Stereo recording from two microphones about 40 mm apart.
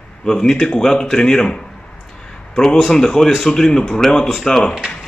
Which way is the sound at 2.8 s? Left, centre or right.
Centre.